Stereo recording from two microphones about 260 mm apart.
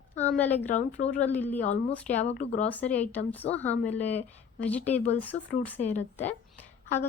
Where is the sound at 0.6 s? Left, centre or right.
Left.